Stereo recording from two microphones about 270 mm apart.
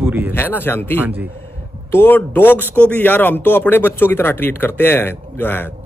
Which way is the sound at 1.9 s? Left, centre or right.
Centre.